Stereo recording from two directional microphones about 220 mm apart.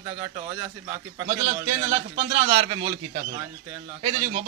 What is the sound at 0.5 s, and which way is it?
Speech, 20° right (ahead or behind).